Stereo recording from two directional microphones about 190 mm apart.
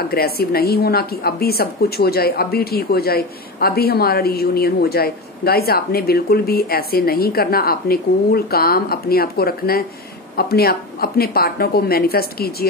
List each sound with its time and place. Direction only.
0.1 s a woman's voice: 55° left (ahead or behind)